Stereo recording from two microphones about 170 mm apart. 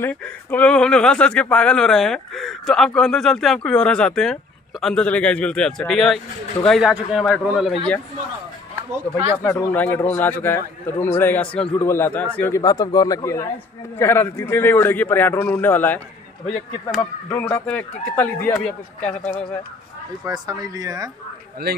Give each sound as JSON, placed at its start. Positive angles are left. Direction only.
{"t": 0.0, "sound": "speech", "side_deg": 10}
{"t": 9.4, "sound": "a man's voice", "side_deg": 15}
{"t": 17.3, "sound": "a man's voice", "side_deg": 10}
{"t": 20.2, "sound": "speech", "side_deg": -20}